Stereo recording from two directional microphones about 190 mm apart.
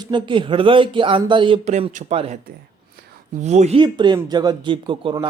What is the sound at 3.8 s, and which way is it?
Speech, 25° right (ahead or behind).